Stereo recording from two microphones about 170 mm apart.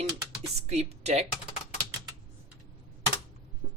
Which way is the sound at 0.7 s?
40° right (ahead or behind).